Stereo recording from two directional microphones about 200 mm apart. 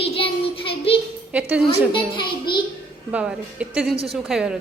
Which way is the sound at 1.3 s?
5° right (ahead or behind).